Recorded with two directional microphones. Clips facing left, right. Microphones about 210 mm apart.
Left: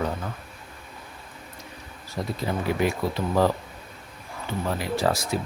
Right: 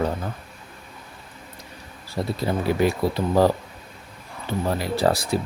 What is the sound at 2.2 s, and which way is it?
Speech, 30° right (ahead or behind).